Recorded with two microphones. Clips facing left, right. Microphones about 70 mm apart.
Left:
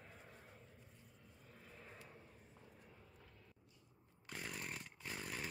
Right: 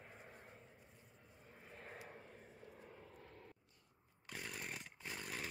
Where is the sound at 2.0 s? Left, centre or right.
Right.